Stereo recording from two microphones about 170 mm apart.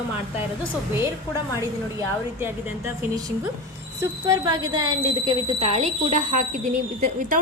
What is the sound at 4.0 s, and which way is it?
A woman's voice, 20° right (ahead or behind).